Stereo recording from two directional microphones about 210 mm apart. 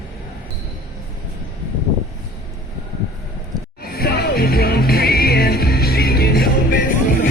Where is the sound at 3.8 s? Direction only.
45° left (ahead or behind).